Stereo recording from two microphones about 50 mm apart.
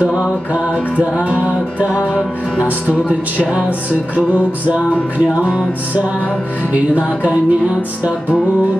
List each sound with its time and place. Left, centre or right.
0.0 s music: centre
5.2 s music: centre